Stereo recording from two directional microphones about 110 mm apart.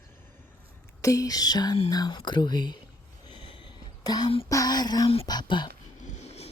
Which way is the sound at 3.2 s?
50° left (ahead or behind).